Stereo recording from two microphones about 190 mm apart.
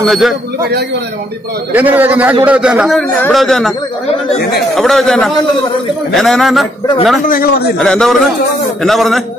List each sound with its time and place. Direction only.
0.0 s a man's voice: centre (ahead or behind)
0.6 s speech: 55° right (ahead or behind)
1.7 s a man's voice: 10° right (ahead or behind)
4.7 s a man's voice: centre (ahead or behind)
7.2 s a man's voice: 50° left (ahead or behind)
7.8 s a man's voice: centre (ahead or behind)